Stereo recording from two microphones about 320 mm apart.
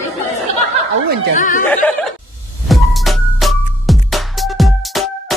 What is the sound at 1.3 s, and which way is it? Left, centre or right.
Speech, left.